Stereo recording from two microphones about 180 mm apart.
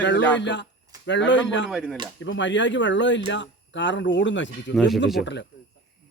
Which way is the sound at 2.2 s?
90° left.